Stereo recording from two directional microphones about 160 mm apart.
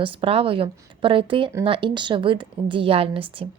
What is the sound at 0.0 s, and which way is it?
A woman's voice, 35° right (ahead or behind).